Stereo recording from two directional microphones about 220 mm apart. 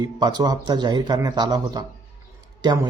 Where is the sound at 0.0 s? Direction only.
20° right (ahead or behind).